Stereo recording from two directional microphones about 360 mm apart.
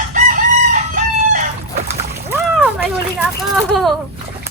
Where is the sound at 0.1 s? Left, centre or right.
Right.